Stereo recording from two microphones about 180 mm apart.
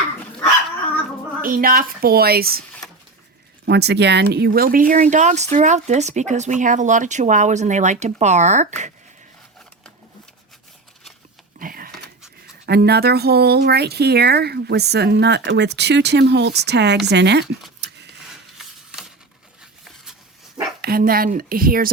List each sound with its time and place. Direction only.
1.4 s speech: 50° right (ahead or behind)
3.7 s speech: 65° right (ahead or behind); by 8.9 s 40° right (ahead or behind)
11.6 s a sound: 50° right (ahead or behind)
12.6 s speech: 65° right (ahead or behind)
20.8 s speech: 55° right (ahead or behind)